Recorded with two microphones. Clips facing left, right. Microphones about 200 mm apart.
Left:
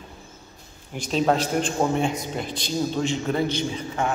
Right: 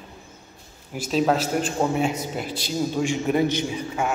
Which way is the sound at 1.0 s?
5° right (ahead or behind).